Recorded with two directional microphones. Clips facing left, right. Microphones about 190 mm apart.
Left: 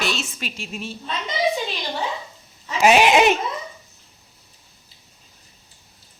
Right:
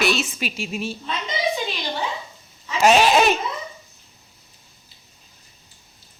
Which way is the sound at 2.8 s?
10° left (ahead or behind).